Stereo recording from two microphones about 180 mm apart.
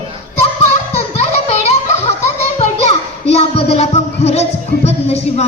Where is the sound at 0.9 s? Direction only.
35° left (ahead or behind).